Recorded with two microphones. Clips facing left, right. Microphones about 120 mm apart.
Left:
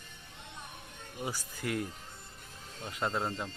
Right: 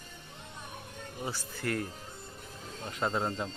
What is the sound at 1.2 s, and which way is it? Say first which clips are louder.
Speech: right 1 dB; 10° left (ahead or behind).